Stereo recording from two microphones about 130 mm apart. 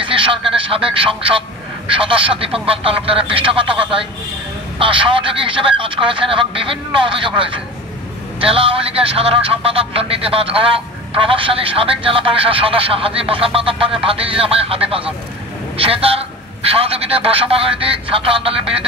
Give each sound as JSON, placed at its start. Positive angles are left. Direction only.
{"t": 0.0, "sound": "a sound", "side_deg": -40}
{"t": 1.9, "sound": "speech", "side_deg": -45}
{"t": 4.7, "sound": "speech", "side_deg": -40}